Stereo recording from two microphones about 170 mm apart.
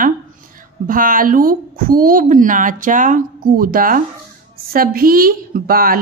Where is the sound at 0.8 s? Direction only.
55° right (ahead or behind).